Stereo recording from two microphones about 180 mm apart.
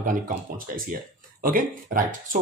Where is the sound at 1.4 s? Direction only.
50° right (ahead or behind).